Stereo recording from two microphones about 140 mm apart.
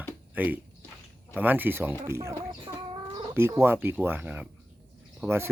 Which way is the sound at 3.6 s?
15° right (ahead or behind).